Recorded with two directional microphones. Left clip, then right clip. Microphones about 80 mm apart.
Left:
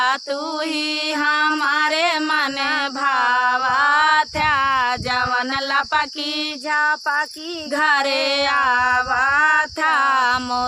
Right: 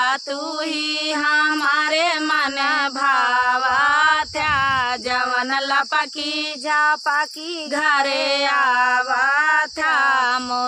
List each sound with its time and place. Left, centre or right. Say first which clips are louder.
1.2 s female singing: even; left
6.7 s a sound: right 1 dB; centre
7.8 s female singing: left 1 dB; left